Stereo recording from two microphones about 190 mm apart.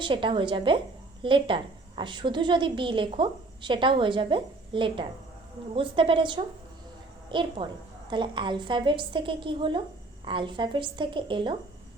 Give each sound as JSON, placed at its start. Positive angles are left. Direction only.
{"t": 0.0, "sound": "a woman's voice", "side_deg": -25}